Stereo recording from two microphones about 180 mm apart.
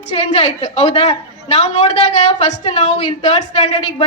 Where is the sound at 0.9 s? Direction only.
35° left (ahead or behind).